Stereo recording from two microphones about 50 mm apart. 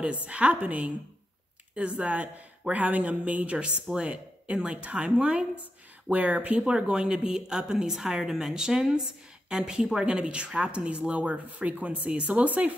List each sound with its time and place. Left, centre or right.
0.0 s speech: right
6.6 s a woman's voice: centre